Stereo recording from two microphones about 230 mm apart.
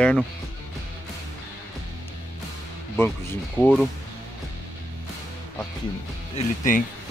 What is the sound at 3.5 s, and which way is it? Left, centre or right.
Speech, centre.